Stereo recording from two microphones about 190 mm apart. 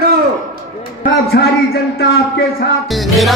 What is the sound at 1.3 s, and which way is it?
Speech, 60° left (ahead or behind).